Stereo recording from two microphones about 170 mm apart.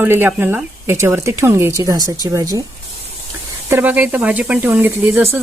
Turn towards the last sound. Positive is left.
turn(degrees=-15)  # may be behind; listen again after turning